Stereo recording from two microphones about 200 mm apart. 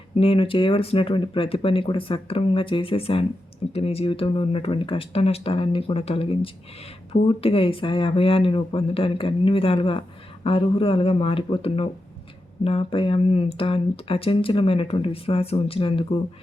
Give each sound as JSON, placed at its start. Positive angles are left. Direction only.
{"t": 0.2, "sound": "speech", "side_deg": 30}